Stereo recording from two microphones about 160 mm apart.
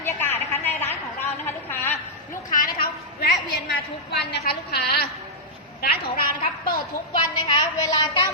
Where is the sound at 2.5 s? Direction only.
60° left (ahead or behind).